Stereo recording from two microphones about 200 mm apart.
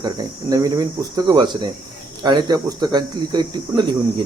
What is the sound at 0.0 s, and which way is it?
Speech, 20° right (ahead or behind).